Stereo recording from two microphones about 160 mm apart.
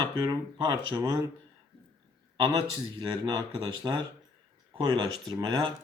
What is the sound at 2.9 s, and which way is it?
Speech, 25° right (ahead or behind).